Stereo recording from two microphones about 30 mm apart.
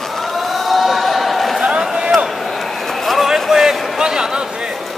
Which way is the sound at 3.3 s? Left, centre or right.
Centre.